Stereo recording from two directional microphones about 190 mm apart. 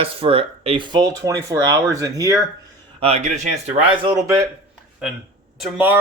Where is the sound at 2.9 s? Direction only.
30° right (ahead or behind).